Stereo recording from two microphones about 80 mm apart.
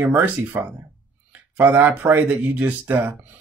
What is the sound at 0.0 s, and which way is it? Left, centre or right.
Speech, right.